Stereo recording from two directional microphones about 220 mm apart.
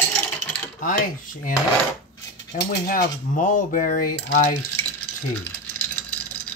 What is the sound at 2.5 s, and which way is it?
Speech, 40° left (ahead or behind).